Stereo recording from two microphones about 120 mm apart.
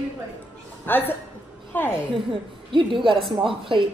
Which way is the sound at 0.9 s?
15° left (ahead or behind).